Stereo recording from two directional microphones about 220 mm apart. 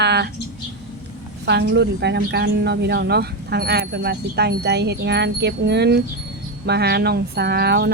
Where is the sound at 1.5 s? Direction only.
50° right (ahead or behind).